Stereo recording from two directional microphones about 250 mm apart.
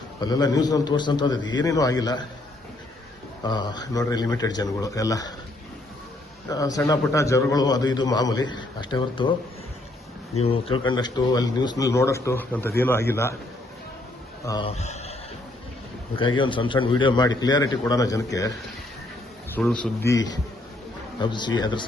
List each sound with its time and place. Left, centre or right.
0.2 s a man's voice: centre
3.4 s a man's voice: centre
6.5 s a man's voice: centre
10.4 s a man's voice: left
14.4 s speech: centre
16.1 s a man's voice: centre
19.5 s a man's voice: centre
21.2 s a man's voice: centre